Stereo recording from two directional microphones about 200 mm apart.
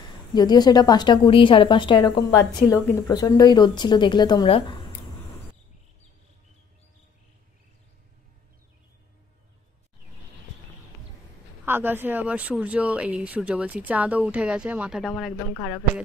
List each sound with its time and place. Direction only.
0.3 s speech: 20° left (ahead or behind)
11.6 s speech: 10° right (ahead or behind); by 15.8 s 10° left (ahead or behind)